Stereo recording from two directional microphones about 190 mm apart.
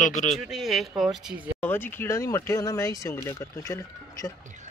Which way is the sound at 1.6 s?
10° left (ahead or behind).